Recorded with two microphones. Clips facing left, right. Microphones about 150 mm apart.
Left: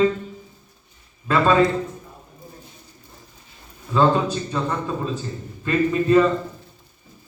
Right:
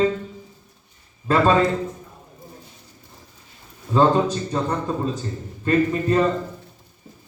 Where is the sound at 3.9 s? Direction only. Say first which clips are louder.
Right 1 dB; 35° right (ahead or behind).